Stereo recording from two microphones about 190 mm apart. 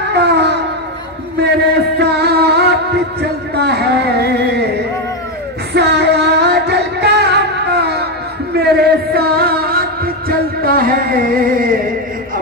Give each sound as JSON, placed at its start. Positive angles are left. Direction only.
{"t": 0.0, "sound": "a sound", "side_deg": -60}
{"t": 2.0, "sound": "music", "side_deg": -60}
{"t": 5.7, "sound": "music", "side_deg": -60}